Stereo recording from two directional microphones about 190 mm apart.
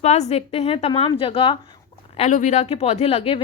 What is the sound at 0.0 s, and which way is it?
A woman's voice, 35° left (ahead or behind).